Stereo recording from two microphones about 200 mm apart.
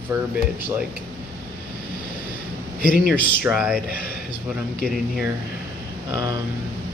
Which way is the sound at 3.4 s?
5° right (ahead or behind).